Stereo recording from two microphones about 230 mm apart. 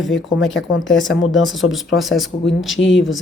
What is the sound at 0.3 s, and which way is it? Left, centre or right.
Speech, left.